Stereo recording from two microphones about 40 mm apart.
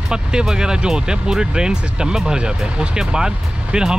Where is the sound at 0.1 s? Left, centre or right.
Centre.